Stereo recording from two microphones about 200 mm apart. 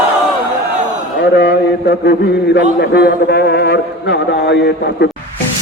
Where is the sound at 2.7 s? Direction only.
55° left (ahead or behind).